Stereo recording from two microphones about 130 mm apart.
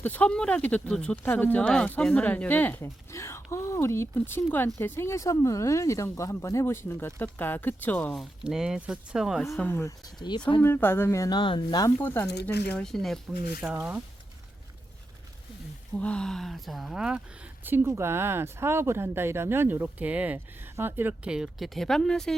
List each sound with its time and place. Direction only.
0.0 s speech: 15° left (ahead or behind)
8.1 s speech: centre (ahead or behind)
9.6 s speech: 20° left (ahead or behind)
10.2 s speech: 35° left (ahead or behind)
10.6 s speech: 15° left (ahead or behind)
11.3 s speech: 35° left (ahead or behind)
12.0 s speech: 20° left (ahead or behind)
12.7 s speech: 5° left (ahead or behind)
16.0 s speech: 10° left (ahead or behind)